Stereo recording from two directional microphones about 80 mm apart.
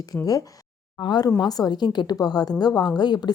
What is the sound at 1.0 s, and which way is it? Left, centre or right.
Speech, left.